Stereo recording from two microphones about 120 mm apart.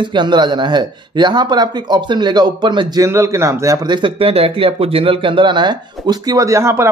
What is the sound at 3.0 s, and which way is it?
Speech, 25° right (ahead or behind).